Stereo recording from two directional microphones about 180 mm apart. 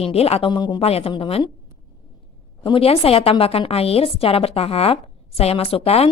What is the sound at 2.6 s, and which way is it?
A woman's voice, 30° left (ahead or behind).